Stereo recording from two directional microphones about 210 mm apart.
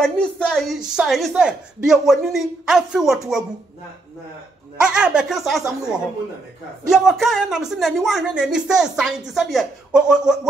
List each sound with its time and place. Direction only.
0.0 s speech: 5° left (ahead or behind)
4.7 s speech: 5° right (ahead or behind)